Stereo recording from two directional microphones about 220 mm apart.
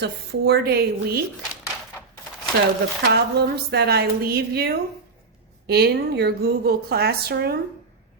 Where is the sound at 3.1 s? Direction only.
45° right (ahead or behind).